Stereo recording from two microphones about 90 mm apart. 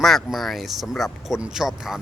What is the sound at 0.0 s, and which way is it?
Speech, centre (ahead or behind).